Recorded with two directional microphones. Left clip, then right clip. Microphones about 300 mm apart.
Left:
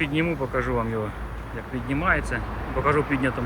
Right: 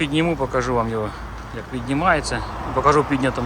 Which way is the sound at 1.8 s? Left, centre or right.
Centre.